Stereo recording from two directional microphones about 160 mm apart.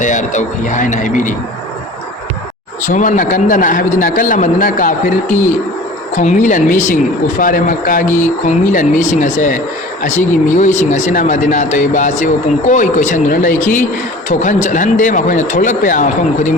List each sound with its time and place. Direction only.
0.0 s speech: 50° left (ahead or behind)
2.8 s a man's voice: 50° left (ahead or behind)